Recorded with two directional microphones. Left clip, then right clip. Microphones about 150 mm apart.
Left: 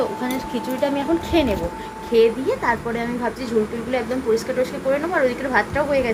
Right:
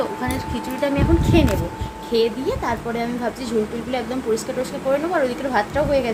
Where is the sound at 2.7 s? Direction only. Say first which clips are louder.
Left 2 dB; 15° right (ahead or behind).